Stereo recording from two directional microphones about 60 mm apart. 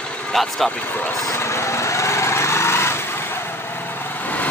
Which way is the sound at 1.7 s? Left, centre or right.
Left.